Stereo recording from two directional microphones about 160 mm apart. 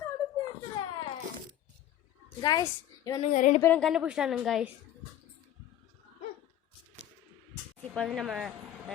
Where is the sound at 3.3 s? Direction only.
55° left (ahead or behind).